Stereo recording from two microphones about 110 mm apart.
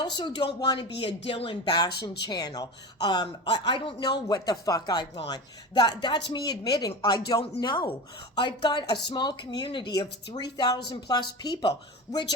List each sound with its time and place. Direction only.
0.0 s speech: 40° left (ahead or behind)
1.0 s speech: 60° left (ahead or behind); by 11.7 s 40° left (ahead or behind)